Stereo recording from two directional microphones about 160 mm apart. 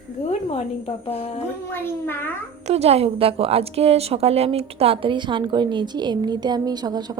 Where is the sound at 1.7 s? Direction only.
15° left (ahead or behind).